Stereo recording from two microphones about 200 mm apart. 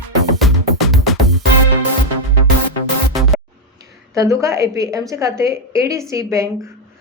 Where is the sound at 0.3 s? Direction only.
Centre (ahead or behind).